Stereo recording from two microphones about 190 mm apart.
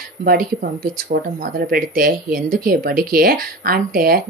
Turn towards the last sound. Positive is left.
turn(degrees=-50)  # may be behind; listen again after turning